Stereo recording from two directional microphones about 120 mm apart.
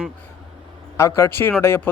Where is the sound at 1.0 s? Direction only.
25° left (ahead or behind).